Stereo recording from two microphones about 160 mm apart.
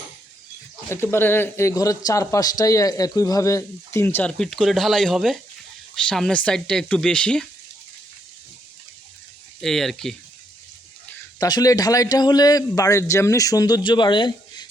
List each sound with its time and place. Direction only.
0.9 s speech: 15° left (ahead or behind)
9.6 s speech: centre (ahead or behind)
11.3 s a man's voice: 25° left (ahead or behind)